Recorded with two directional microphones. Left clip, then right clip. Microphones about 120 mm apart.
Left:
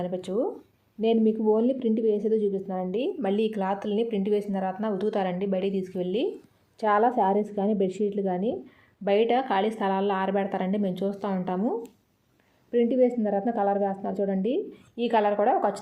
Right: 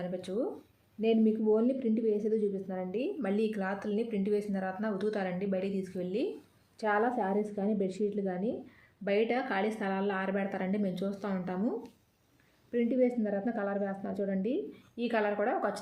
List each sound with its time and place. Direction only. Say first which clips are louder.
0.0 s a woman's voice: left 7 dB; 30° left (ahead or behind)